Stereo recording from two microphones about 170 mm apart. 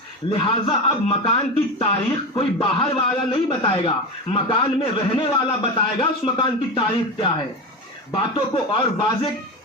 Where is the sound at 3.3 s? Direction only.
30° left (ahead or behind).